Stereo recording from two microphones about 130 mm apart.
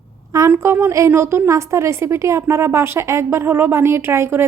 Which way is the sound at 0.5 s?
20° right (ahead or behind).